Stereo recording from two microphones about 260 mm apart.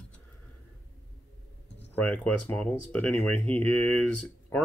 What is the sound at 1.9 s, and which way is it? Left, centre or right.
Speech, centre.